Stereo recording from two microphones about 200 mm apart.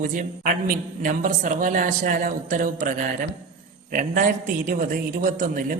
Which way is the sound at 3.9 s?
45° right (ahead or behind).